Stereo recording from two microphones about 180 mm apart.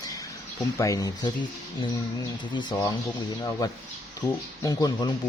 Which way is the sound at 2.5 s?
25° left (ahead or behind).